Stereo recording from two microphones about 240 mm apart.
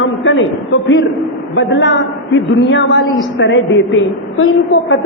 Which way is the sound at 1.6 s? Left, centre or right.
Left.